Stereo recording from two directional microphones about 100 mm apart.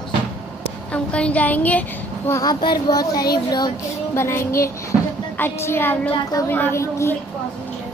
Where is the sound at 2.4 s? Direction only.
45° left (ahead or behind).